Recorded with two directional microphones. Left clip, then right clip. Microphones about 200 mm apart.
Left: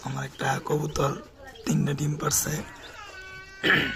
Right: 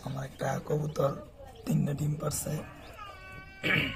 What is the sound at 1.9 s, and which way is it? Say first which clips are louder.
Speech: left 6 dB; 20° left (ahead or behind).